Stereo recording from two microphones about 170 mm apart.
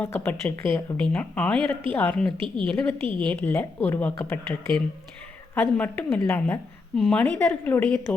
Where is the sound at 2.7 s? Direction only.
5° left (ahead or behind).